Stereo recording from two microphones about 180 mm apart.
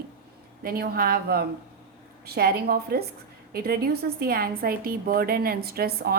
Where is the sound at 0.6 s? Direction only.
55° right (ahead or behind).